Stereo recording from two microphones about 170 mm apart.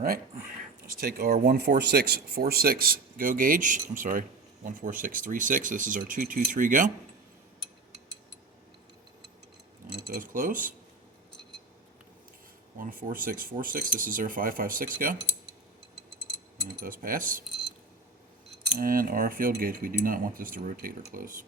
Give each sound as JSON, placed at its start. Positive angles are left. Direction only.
{"t": 0.0, "sound": "speech", "side_deg": -60}
{"t": 9.9, "sound": "speech", "side_deg": -75}
{"t": 10.2, "sound": "speech", "side_deg": -50}
{"t": 12.7, "sound": "speech", "side_deg": -55}
{"t": 16.8, "sound": "speech", "side_deg": -55}
{"t": 18.8, "sound": "speech", "side_deg": -55}